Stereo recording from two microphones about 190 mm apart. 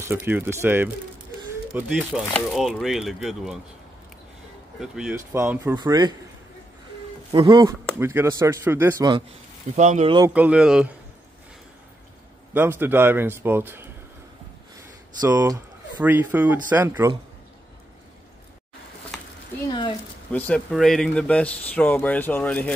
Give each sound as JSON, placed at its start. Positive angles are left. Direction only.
{"t": 0.0, "sound": "a man's voice", "side_deg": -10}
{"t": 4.7, "sound": "a man's voice", "side_deg": -5}
{"t": 7.3, "sound": "a man's voice", "side_deg": -20}
{"t": 9.8, "sound": "speech", "side_deg": -40}
{"t": 10.3, "sound": "speech", "side_deg": -5}
{"t": 12.5, "sound": "a man's voice", "side_deg": -10}
{"t": 16.0, "sound": "a man's voice", "side_deg": -10}
{"t": 20.2, "sound": "a man's voice", "side_deg": 5}